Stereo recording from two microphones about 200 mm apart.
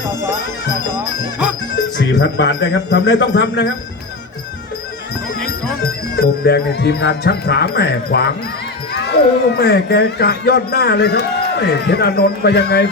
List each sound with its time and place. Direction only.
2.0 s speech: 60° left (ahead or behind)
6.1 s music: 50° left (ahead or behind)
8.9 s speech: 55° left (ahead or behind)